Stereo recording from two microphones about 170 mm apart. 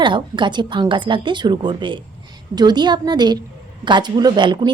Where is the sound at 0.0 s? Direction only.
30° right (ahead or behind).